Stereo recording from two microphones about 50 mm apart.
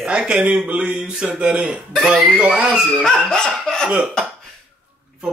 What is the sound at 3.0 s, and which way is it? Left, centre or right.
Laughter, centre.